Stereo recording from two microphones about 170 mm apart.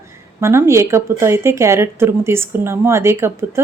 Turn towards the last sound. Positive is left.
turn(degrees=-15)  # may be behind; listen again after turning